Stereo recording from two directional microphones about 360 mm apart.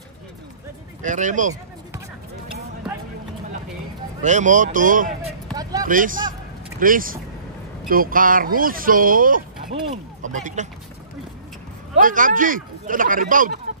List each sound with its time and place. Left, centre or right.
1.0 s speech: right
4.2 s a sound: centre
5.9 s speech: right
11.9 s speech: right